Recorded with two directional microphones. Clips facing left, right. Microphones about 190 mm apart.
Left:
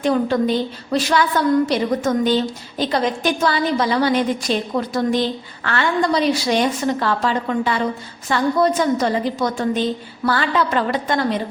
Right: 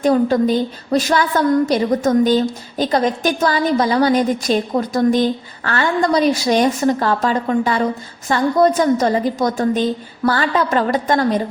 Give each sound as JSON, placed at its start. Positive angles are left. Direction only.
{"t": 0.0, "sound": "a woman's voice", "side_deg": -45}